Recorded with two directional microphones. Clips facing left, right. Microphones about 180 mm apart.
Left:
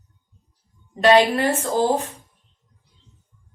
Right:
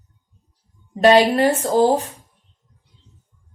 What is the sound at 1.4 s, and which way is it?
Speech, 40° right (ahead or behind).